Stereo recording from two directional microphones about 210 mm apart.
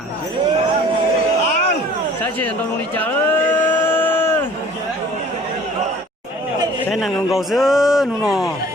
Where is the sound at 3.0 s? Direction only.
10° left (ahead or behind).